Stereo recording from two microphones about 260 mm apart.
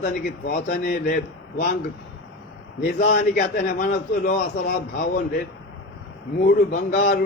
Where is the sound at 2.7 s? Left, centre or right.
Left.